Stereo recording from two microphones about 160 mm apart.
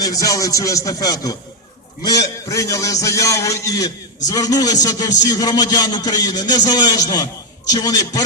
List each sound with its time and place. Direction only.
0.0 s a man's voice: 20° left (ahead or behind)